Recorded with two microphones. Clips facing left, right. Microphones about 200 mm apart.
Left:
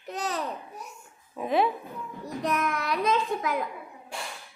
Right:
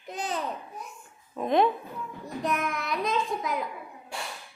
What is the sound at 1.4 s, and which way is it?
Speech, 5° left (ahead or behind).